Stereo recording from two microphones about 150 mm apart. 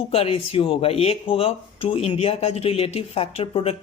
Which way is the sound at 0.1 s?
40° left (ahead or behind).